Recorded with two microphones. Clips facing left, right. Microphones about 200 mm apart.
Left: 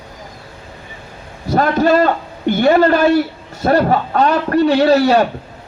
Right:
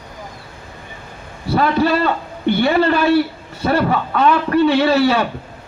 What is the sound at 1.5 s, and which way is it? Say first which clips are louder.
A man's voice: left 2 dB; 45° left (ahead or behind).